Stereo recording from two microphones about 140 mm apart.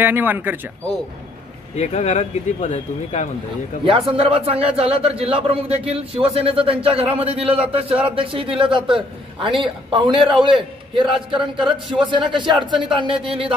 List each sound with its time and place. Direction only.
0.0 s speech: 15° right (ahead or behind)
1.8 s speech: 50° left (ahead or behind)
3.8 s a man's voice: 40° right (ahead or behind)